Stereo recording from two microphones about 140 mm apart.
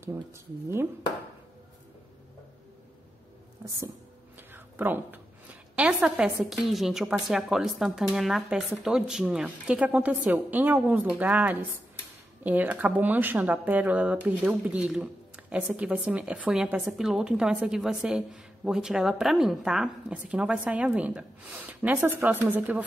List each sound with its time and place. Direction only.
3.6 s speech: 20° right (ahead or behind)
4.5 s a sound: 15° right (ahead or behind)
6.4 s a woman's voice: centre (ahead or behind)